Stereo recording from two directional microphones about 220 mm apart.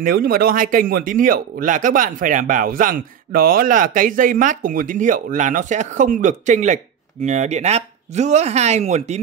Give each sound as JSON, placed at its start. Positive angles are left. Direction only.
{"t": 0.0, "sound": "speech", "side_deg": -40}